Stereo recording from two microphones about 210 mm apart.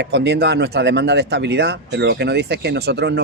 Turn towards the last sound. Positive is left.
turn(degrees=-50)  # may be behind; listen again after turning